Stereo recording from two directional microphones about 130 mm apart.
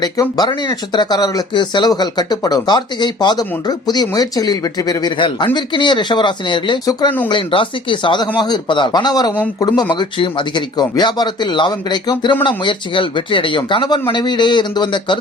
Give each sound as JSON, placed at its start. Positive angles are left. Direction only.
{"t": 0.0, "sound": "speech", "side_deg": 30}